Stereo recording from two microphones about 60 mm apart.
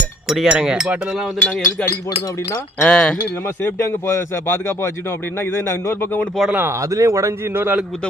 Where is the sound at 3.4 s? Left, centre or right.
Left.